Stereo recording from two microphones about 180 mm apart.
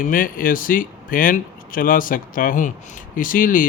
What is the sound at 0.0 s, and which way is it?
Speech, 50° left (ahead or behind).